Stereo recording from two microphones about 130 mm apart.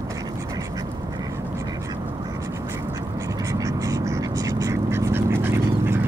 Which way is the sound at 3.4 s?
25° right (ahead or behind).